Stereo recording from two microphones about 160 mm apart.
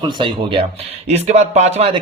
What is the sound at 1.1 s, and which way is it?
Speech, 45° right (ahead or behind).